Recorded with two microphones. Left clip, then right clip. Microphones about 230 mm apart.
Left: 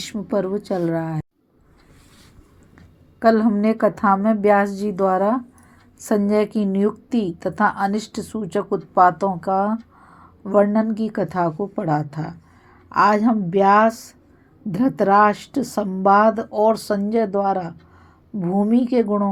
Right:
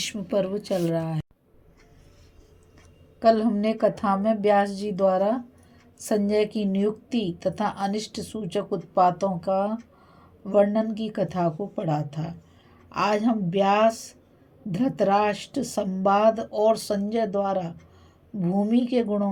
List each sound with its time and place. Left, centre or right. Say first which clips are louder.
0.1 s a woman's voice: left 7 dB; centre
3.2 s a woman's voice: left 3 dB; centre